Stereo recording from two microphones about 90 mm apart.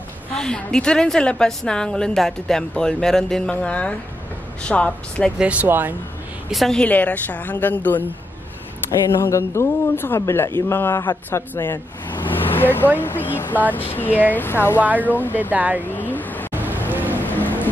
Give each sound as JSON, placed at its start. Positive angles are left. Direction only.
{"t": 0.4, "sound": "a woman's voice", "side_deg": 10}
{"t": 5.4, "sound": "speech", "side_deg": -15}
{"t": 6.5, "sound": "a woman's voice", "side_deg": 0}
{"t": 6.8, "sound": "speech", "side_deg": 15}
{"t": 9.2, "sound": "speech", "side_deg": 30}
{"t": 14.8, "sound": "speech", "side_deg": -20}
{"t": 15.0, "sound": "speech", "side_deg": 20}
{"t": 15.5, "sound": "speech", "side_deg": -20}
{"t": 15.8, "sound": "vehicle", "side_deg": 20}
{"t": 16.5, "sound": "vehicle", "side_deg": -20}
{"t": 16.9, "sound": "boat", "side_deg": -20}
{"t": 17.2, "sound": "music", "side_deg": 20}